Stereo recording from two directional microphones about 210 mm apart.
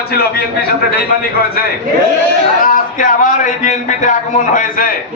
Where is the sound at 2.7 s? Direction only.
40° left (ahead or behind).